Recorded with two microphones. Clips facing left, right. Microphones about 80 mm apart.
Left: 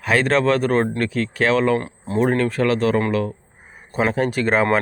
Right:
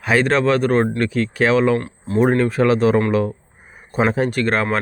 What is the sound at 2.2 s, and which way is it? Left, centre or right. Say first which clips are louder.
Speech: right 3 dB; centre.